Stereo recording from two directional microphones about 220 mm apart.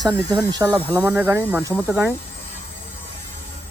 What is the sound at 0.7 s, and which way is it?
Speech, 10° left (ahead or behind).